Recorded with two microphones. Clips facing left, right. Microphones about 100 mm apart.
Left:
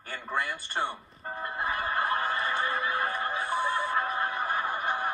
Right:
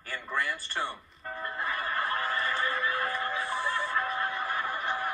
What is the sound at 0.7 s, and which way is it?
Music, 25° left (ahead or behind).